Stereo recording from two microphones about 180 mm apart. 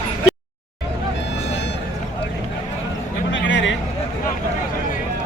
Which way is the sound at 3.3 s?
90° left.